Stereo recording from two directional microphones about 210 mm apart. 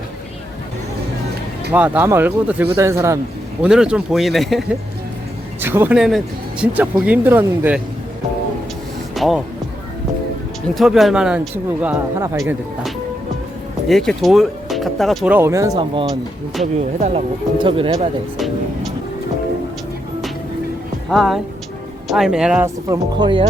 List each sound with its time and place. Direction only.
1.7 s speech: 5° right (ahead or behind)
5.5 s speech: 10° right (ahead or behind)
9.1 s speech: centre (ahead or behind)
10.8 s speech: centre (ahead or behind); by 17.9 s 25° right (ahead or behind)
18.3 s music: centre (ahead or behind)
21.1 s speech: centre (ahead or behind); by 23.5 s 20° right (ahead or behind)